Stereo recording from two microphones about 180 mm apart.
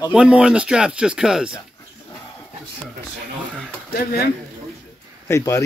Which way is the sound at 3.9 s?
55° left (ahead or behind).